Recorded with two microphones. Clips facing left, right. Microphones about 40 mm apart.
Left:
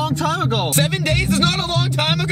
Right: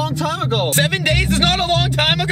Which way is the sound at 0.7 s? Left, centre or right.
Right.